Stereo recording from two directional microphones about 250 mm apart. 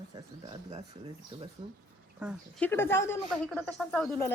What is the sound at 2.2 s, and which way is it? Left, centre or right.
Speech, centre.